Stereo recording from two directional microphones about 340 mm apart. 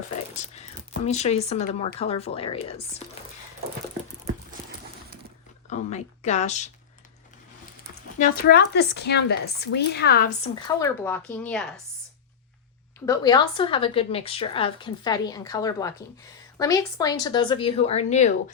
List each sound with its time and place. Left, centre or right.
1.0 s a woman's voice: centre
5.6 s speech: centre
8.2 s a woman's voice: left; by 11.6 s centre
13.1 s a woman's voice: centre